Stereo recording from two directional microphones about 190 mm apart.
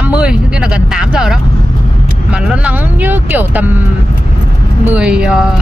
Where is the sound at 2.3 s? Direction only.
5° right (ahead or behind).